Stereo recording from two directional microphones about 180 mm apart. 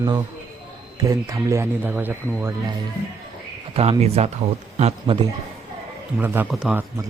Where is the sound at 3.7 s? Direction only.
35° right (ahead or behind).